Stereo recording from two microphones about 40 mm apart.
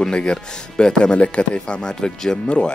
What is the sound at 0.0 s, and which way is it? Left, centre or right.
Speech, left.